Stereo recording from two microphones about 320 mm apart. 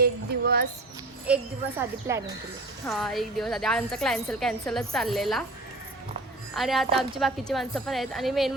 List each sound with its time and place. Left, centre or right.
0.0 s a sound: right
1.3 s a woman's voice: centre
6.6 s a woman's voice: centre